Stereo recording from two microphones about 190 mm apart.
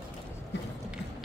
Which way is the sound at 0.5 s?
65° left (ahead or behind).